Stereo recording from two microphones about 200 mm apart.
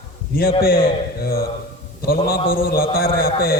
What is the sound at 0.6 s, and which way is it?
A man's voice, 45° left (ahead or behind).